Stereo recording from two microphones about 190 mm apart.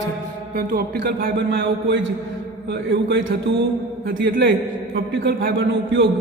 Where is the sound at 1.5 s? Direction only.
75° right (ahead or behind).